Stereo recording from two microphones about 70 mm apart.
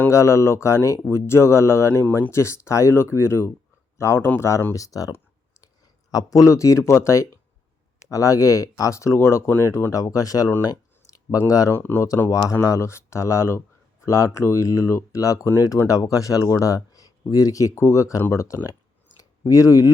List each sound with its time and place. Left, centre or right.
0.1 s speech: left
4.7 s speech: left
9.9 s speech: left
10.6 s a sound: left
11.4 s speech: left
11.7 s speech: left
12.6 s speech: left
18.2 s speech: left
18.4 s speech: left